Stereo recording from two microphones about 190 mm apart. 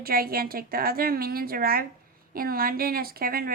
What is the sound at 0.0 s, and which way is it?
Speech, 50° right (ahead or behind).